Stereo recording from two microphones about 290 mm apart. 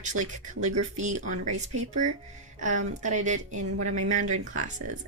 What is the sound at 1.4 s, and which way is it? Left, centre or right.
Speech, right.